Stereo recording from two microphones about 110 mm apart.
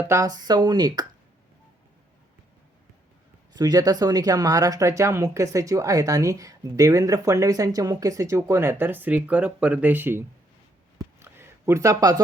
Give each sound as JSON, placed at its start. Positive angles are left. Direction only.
{"t": 0.0, "sound": "speech", "side_deg": -25}
{"t": 3.5, "sound": "speech", "side_deg": -35}
{"t": 10.9, "sound": "a sound", "side_deg": -20}